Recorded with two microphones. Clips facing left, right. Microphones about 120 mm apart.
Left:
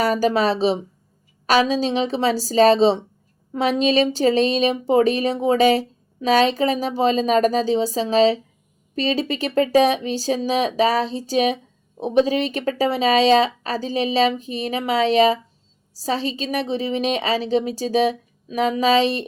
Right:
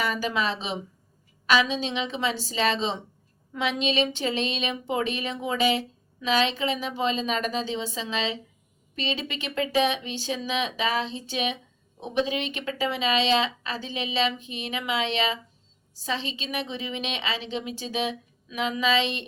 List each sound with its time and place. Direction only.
0.0 s speech: 40° left (ahead or behind)